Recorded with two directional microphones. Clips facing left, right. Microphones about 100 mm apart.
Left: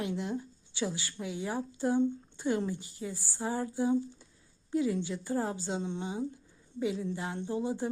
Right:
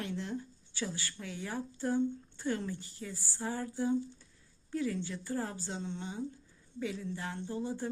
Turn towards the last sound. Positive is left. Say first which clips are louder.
# left 4 dB
turn(degrees=15)  # may be behind; listen again after turning